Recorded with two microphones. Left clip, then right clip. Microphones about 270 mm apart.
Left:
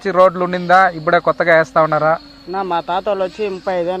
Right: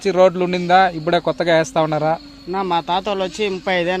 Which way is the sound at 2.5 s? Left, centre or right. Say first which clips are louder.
Even; right.